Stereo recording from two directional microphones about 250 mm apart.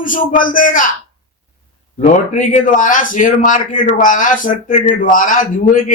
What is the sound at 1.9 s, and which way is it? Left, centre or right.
Speech, left.